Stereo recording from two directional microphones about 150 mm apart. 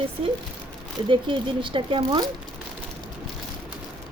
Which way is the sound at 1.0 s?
35° right (ahead or behind).